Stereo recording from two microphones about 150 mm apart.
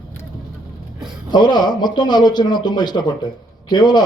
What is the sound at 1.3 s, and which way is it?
A man's voice, 30° left (ahead or behind).